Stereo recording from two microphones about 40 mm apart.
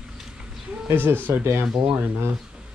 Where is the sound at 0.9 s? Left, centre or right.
Right.